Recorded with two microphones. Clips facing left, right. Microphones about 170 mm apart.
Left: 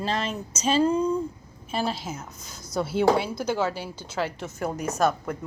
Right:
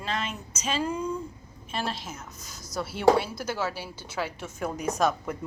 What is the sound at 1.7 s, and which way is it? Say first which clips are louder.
Speech: left 4 dB; 5° left (ahead or behind).